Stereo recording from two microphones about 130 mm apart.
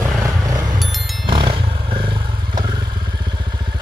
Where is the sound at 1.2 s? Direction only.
40° right (ahead or behind).